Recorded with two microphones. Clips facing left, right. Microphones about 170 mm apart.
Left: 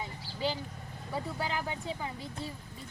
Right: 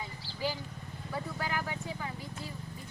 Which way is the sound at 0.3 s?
25° left (ahead or behind).